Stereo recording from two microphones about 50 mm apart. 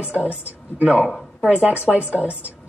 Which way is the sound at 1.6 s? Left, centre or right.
Right.